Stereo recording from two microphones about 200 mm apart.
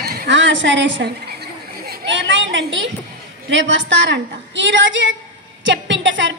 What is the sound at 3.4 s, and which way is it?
A woman's voice, 65° right (ahead or behind).